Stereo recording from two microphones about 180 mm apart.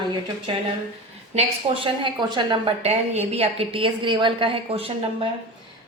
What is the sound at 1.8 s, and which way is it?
A woman's voice, 25° right (ahead or behind).